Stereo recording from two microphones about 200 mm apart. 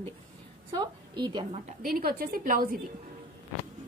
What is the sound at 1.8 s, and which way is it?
A woman's voice, 45° right (ahead or behind).